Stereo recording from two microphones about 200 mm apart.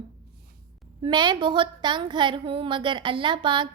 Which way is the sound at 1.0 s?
20° right (ahead or behind).